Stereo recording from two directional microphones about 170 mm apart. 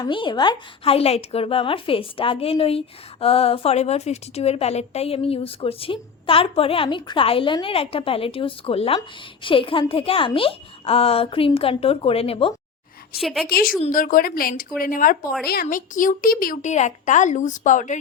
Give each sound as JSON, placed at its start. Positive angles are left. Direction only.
{"t": 0.0, "sound": "speech", "side_deg": 30}
{"t": 13.1, "sound": "a woman's voice", "side_deg": 0}
{"t": 13.9, "sound": "speech", "side_deg": 55}